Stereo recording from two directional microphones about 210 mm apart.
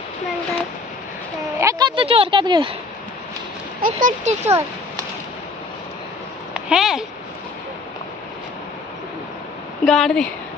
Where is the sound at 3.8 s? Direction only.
35° right (ahead or behind).